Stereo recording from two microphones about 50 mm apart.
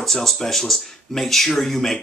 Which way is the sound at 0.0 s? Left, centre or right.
Centre.